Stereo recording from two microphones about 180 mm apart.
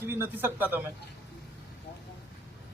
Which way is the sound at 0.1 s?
15° right (ahead or behind).